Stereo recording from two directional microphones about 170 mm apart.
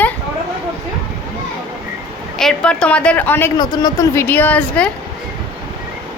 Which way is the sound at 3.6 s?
25° left (ahead or behind).